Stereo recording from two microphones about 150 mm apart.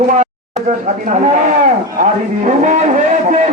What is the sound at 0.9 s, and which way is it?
A man's voice, 50° right (ahead or behind).